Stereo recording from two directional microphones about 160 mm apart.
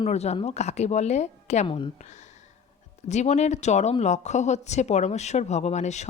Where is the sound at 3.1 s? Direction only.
45° left (ahead or behind).